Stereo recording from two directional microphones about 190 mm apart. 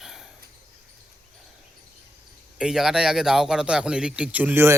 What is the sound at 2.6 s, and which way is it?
Speech, 5° right (ahead or behind).